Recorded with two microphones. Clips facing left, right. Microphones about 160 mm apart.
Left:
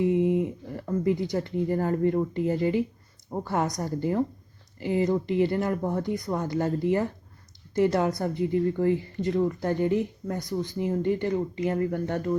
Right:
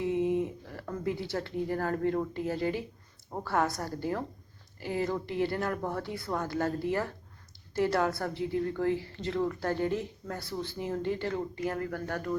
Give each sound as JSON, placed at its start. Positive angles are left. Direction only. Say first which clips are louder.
{"t": 0.0, "sound": "speech", "louder": "left 5 dB", "side_deg": 15}